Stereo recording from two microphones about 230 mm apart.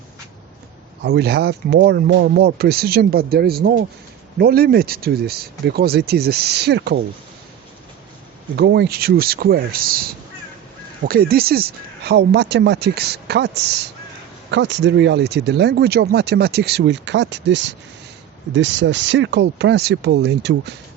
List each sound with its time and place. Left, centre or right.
1.0 s speech: right
8.5 s speech: right